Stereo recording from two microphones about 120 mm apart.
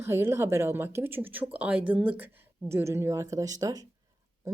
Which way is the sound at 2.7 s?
25° right (ahead or behind).